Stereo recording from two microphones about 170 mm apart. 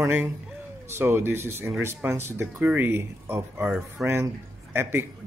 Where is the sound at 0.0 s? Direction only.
10° right (ahead or behind).